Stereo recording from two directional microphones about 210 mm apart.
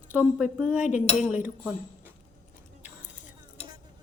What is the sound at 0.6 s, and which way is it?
Speech, 5° right (ahead or behind).